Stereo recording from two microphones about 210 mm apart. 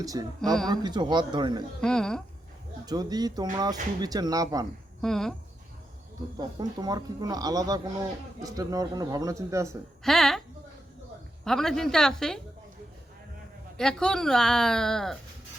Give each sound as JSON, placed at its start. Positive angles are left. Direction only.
{"t": 0.0, "sound": "speech", "side_deg": -15}
{"t": 1.8, "sound": "a woman's voice", "side_deg": 5}
{"t": 2.8, "sound": "speech", "side_deg": -20}
{"t": 4.9, "sound": "speech", "side_deg": 0}
{"t": 6.3, "sound": "speech", "side_deg": -20}
{"t": 10.0, "sound": "speech", "side_deg": 0}
{"t": 11.4, "sound": "a woman's voice", "side_deg": 0}
{"t": 13.7, "sound": "a woman's voice", "side_deg": 5}